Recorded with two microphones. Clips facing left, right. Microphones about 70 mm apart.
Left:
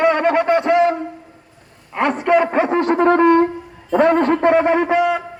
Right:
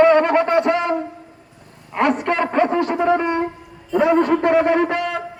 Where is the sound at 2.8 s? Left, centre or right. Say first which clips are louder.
Left 4 dB; left.